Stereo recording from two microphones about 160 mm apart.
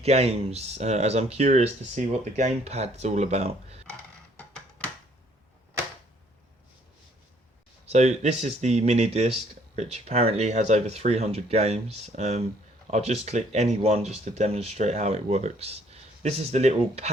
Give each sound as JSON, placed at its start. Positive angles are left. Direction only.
{"t": 0.0, "sound": "speech", "side_deg": -40}
{"t": 4.4, "sound": "a sound", "side_deg": 5}
{"t": 7.9, "sound": "speech", "side_deg": -45}